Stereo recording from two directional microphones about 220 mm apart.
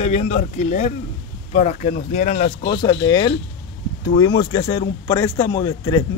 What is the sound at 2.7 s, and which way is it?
A man's voice, 20° left (ahead or behind).